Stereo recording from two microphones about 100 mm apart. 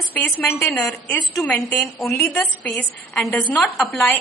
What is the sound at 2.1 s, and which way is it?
Speech, 20° left (ahead or behind).